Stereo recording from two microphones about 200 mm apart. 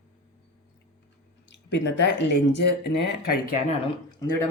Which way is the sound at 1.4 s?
60° left (ahead or behind).